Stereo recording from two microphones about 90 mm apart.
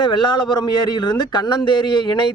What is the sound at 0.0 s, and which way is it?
A man's voice, 60° left (ahead or behind).